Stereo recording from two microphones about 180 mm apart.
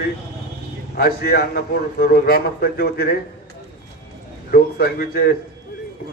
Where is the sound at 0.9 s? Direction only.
60° left (ahead or behind).